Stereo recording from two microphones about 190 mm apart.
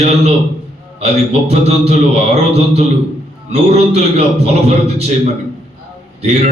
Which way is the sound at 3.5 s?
35° right (ahead or behind).